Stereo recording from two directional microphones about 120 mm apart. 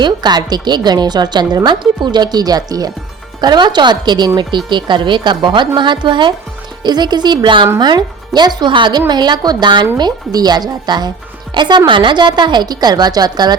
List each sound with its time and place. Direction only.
0.0 s a woman's voice: 35° right (ahead or behind)